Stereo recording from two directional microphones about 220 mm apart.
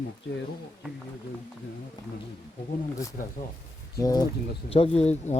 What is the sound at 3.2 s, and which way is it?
Speech, 40° left (ahead or behind).